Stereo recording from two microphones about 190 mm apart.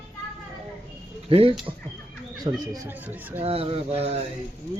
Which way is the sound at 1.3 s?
30° right (ahead or behind).